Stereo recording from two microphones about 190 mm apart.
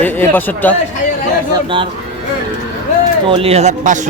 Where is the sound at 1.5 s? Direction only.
25° right (ahead or behind).